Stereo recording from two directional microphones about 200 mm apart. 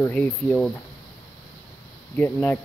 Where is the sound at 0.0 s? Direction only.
10° left (ahead or behind).